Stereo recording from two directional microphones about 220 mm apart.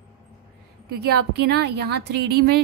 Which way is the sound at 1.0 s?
50° right (ahead or behind).